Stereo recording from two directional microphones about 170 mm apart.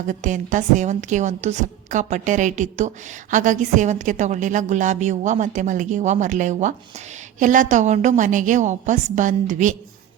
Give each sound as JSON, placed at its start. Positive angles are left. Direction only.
{"t": 0.1, "sound": "a woman's voice", "side_deg": -50}